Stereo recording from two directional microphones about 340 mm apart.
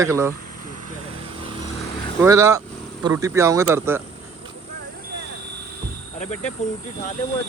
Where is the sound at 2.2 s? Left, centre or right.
Centre.